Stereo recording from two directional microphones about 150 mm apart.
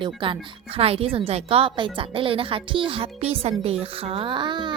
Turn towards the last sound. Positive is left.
turn(degrees=-30)  # may be behind; listen again after turning